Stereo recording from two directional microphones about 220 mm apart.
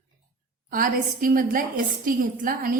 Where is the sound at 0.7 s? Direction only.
40° right (ahead or behind).